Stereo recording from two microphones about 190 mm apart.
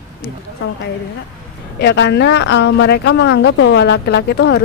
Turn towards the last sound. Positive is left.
turn(degrees=60)  # may be behind; listen again after turning